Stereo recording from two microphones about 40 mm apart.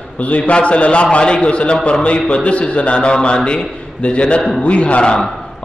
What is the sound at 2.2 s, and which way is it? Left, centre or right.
A man's voice, left.